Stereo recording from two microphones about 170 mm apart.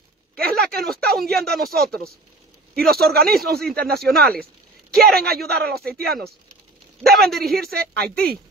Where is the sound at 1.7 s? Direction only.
65° right (ahead or behind).